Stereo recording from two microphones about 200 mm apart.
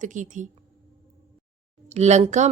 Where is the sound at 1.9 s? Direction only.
35° right (ahead or behind).